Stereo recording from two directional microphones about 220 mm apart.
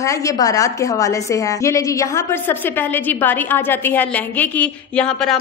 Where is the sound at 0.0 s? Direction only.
15° left (ahead or behind).